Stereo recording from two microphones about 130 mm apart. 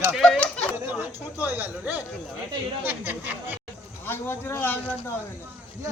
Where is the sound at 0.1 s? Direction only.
5° left (ahead or behind).